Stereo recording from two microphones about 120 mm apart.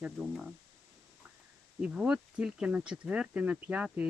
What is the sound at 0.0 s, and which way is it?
Speech, 5° right (ahead or behind).